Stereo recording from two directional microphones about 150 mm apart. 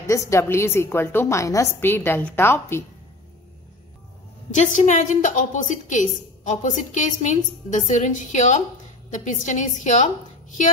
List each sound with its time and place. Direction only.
0.0 s a woman's voice: 20° left (ahead or behind)
4.5 s a woman's voice: 55° left (ahead or behind)